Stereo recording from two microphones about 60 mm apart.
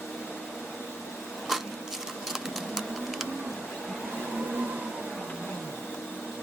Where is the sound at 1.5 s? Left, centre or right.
Centre.